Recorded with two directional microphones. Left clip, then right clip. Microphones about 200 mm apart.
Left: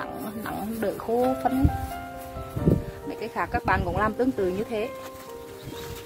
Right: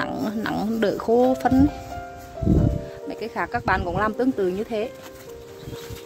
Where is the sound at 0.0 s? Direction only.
55° right (ahead or behind).